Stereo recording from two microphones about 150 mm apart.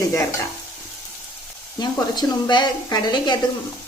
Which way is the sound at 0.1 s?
20° left (ahead or behind).